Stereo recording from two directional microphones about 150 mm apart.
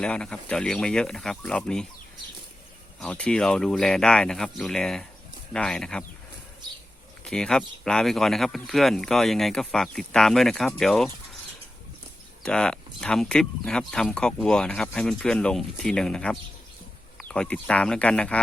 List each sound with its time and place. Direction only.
0.0 s speech: 5° left (ahead or behind)
3.0 s speech: 5° left (ahead or behind)
7.3 s speech: 5° left (ahead or behind)
12.4 s speech: 5° left (ahead or behind)